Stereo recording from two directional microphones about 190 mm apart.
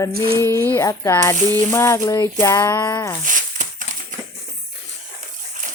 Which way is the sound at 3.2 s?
45° right (ahead or behind).